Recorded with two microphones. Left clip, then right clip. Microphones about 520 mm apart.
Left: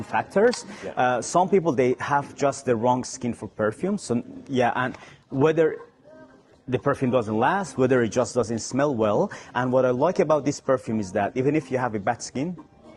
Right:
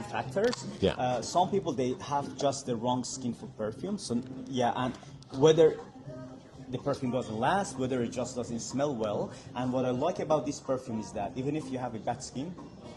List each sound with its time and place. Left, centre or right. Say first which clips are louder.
0.1 s speech: left 9 dB; left
0.9 s speech: left 11 dB; left